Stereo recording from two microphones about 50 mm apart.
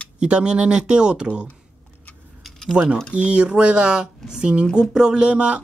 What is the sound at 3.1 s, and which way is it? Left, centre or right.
Speech, right.